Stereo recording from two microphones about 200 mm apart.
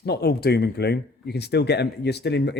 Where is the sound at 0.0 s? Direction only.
55° left (ahead or behind).